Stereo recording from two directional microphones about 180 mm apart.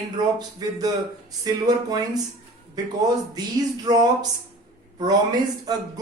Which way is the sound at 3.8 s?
20° right (ahead or behind).